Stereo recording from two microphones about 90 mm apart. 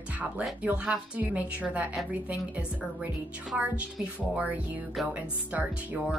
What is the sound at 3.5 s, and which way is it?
Speech, 15° right (ahead or behind).